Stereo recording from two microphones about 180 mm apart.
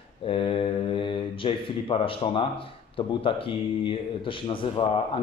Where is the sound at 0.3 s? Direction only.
30° left (ahead or behind).